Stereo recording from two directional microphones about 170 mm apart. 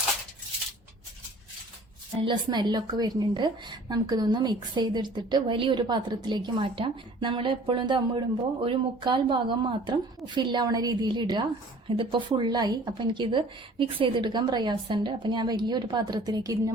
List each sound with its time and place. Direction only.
2.2 s a woman's voice: 25° right (ahead or behind)